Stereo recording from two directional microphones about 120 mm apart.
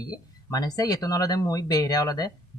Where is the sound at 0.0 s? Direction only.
35° left (ahead or behind).